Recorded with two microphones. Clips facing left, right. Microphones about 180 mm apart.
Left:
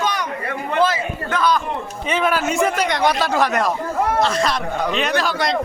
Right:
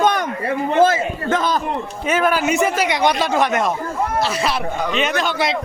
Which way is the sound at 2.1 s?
Centre (ahead or behind).